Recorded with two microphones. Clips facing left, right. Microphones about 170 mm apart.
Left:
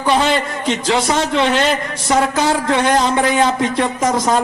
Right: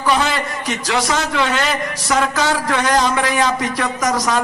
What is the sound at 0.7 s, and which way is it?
A man's voice, 25° left (ahead or behind).